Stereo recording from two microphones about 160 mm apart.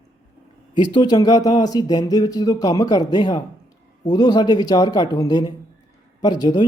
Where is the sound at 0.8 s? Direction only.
25° left (ahead or behind).